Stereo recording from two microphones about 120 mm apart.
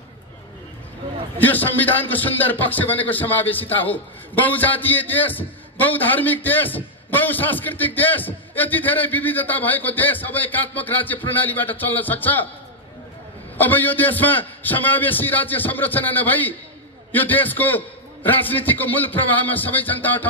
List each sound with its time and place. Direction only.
1.4 s a man's voice: 15° left (ahead or behind)
13.6 s a man's voice: 15° left (ahead or behind)